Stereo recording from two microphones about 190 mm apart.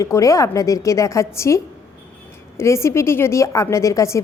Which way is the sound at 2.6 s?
15° left (ahead or behind).